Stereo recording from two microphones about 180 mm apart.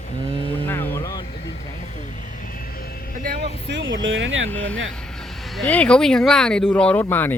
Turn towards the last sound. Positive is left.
turn(degrees=10)  # may be behind; listen again after turning